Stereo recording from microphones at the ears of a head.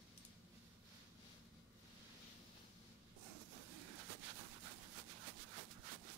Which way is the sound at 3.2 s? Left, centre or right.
Right.